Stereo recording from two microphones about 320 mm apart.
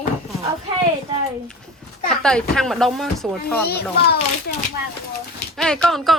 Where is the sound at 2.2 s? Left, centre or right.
Centre.